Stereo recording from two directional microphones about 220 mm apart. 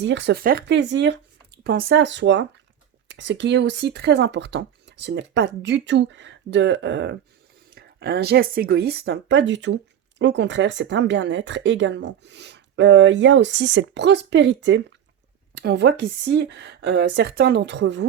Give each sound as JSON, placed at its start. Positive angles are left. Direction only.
{"t": 0.0, "sound": "speech", "side_deg": -55}